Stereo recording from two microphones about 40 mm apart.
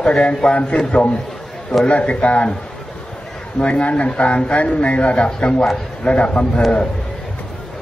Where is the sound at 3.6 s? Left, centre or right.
Left.